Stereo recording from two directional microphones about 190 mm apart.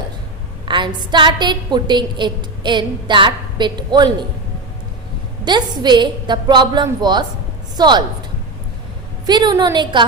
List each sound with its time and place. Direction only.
0.6 s a woman's voice: 25° right (ahead or behind)
5.5 s a woman's voice: 25° right (ahead or behind)
9.2 s a woman's voice: 20° right (ahead or behind)